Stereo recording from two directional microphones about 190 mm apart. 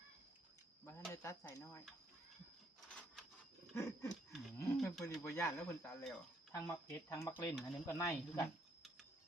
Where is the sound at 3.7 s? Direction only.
15° left (ahead or behind).